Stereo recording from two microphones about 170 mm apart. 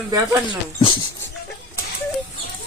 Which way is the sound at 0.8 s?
30° left (ahead or behind).